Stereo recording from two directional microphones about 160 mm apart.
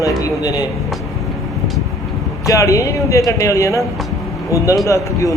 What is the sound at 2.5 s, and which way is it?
Speech, 20° left (ahead or behind).